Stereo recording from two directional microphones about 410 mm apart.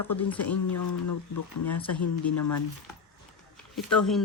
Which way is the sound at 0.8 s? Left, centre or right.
Left.